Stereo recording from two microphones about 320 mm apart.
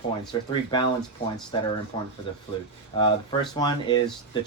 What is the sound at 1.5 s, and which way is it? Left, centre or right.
Speech, centre.